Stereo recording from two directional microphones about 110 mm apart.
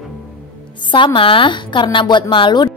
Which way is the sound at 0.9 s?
50° left (ahead or behind).